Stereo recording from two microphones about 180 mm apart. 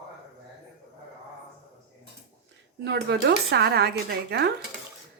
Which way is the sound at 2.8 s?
70° right (ahead or behind).